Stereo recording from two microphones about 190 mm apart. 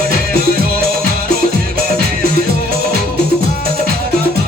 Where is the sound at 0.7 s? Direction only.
50° right (ahead or behind).